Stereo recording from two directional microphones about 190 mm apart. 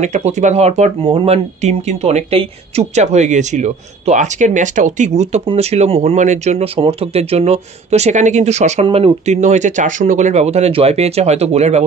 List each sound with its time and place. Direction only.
0.0 s speech: 35° right (ahead or behind)